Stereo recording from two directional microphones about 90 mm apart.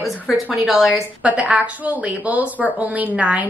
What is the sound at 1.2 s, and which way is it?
Speech, 15° right (ahead or behind).